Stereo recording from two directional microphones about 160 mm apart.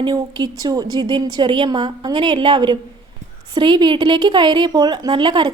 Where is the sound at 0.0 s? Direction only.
25° right (ahead or behind).